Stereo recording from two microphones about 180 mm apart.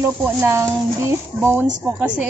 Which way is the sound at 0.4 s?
15° right (ahead or behind).